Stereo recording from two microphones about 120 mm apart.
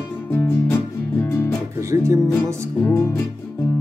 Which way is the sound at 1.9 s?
25° right (ahead or behind).